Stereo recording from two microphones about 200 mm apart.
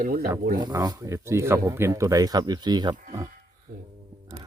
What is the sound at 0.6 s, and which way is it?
Speech, 20° right (ahead or behind).